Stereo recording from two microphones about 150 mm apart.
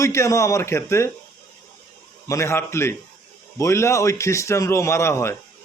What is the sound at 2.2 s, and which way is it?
A man's voice, 20° left (ahead or behind).